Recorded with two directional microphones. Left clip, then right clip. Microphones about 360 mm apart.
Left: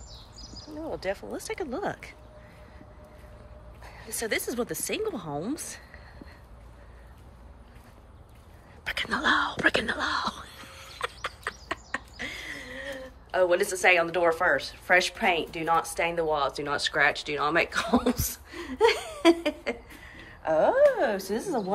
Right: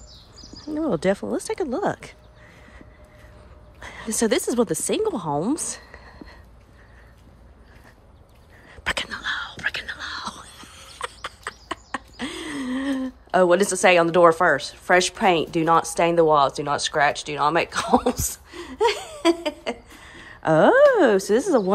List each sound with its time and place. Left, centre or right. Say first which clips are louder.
0.9 s speech: right 8 dB; centre
3.8 s speech: right 10 dB; centre
8.8 s a sound: right 5 dB; centre
9.1 s whispering: left 4 dB; centre
20.2 s speech: right 7 dB; centre